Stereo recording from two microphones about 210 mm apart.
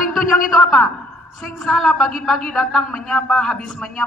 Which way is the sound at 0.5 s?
Centre (ahead or behind).